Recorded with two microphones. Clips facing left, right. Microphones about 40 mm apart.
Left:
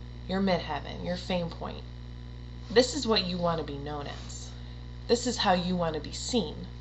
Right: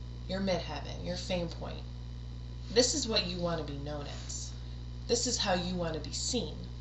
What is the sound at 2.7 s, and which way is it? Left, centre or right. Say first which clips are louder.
A woman's voice: left 5 dB; left.